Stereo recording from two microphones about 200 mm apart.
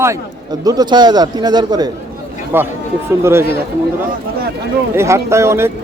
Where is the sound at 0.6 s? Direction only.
20° right (ahead or behind).